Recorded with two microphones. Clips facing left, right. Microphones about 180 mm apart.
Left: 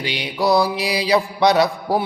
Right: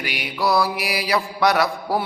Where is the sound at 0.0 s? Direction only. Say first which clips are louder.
Left 3 dB; 25° left (ahead or behind).